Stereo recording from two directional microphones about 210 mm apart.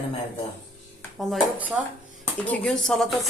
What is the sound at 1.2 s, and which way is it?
Speech, centre (ahead or behind).